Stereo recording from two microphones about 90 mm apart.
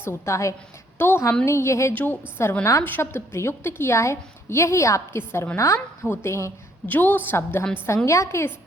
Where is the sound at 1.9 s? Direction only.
20° left (ahead or behind).